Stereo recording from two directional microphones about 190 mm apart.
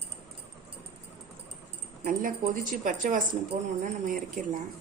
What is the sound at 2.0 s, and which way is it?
Speech, 45° right (ahead or behind).